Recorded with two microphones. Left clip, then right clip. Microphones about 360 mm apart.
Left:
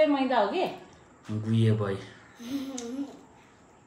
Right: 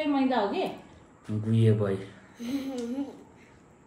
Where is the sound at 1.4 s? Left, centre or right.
Centre.